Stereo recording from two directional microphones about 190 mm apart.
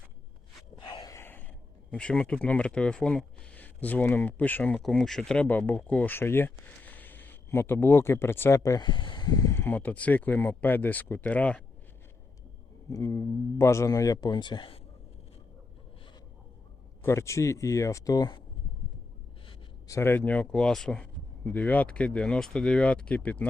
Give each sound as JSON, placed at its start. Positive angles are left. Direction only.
{"t": 0.8, "sound": "a sound", "side_deg": 25}
{"t": 1.9, "sound": "speech", "side_deg": 5}
{"t": 12.9, "sound": "speech", "side_deg": 15}
{"t": 17.0, "sound": "speech", "side_deg": 15}
{"t": 19.5, "sound": "speech", "side_deg": 15}